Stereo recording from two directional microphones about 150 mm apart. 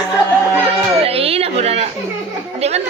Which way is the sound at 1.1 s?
40° right (ahead or behind).